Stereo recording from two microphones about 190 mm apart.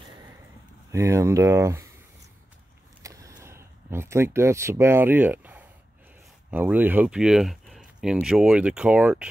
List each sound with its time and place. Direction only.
0.9 s speech: 15° right (ahead or behind)
3.0 s vehicle: 15° right (ahead or behind)
3.4 s speech: 15° right (ahead or behind)